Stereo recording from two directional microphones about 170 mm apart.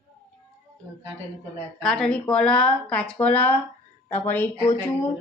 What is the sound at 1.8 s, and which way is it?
A woman's voice, 5° left (ahead or behind).